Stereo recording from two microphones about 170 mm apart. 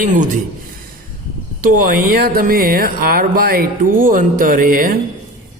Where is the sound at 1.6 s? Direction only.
55° right (ahead or behind).